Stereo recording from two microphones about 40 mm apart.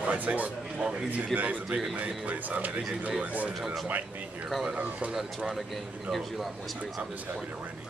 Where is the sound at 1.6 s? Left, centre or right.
Right.